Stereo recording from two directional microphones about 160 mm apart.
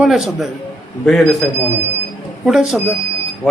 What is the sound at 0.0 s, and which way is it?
Speech, centre (ahead or behind).